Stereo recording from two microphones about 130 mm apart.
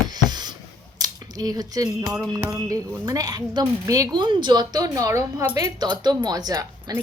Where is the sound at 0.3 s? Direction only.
35° right (ahead or behind).